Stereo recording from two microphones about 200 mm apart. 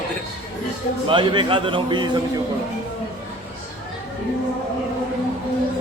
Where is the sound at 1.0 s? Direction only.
25° right (ahead or behind).